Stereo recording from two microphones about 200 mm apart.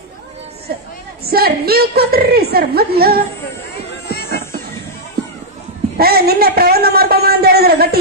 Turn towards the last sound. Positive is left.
turn(degrees=-50)  # may be behind; listen again after turning